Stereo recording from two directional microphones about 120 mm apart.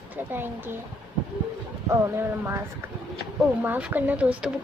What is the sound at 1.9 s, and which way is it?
A woman's voice, 20° right (ahead or behind).